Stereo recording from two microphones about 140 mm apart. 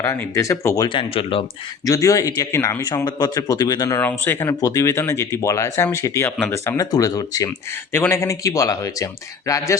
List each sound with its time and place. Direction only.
0.0 s speech: 20° left (ahead or behind)
0.9 s speech: 40° left (ahead or behind)
1.8 s speech: 25° left (ahead or behind)
4.0 s speech: 15° left (ahead or behind)